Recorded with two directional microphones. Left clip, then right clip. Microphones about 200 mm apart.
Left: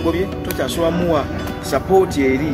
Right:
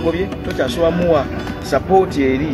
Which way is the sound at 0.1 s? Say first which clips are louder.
Even; 10° right (ahead or behind).